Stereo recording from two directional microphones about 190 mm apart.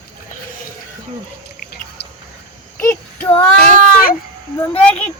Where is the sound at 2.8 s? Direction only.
15° left (ahead or behind).